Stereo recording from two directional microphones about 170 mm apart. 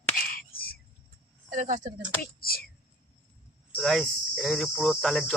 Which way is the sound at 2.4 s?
60° left (ahead or behind).